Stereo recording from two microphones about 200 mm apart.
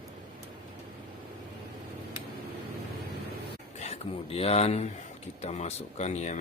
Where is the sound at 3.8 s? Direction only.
30° left (ahead or behind).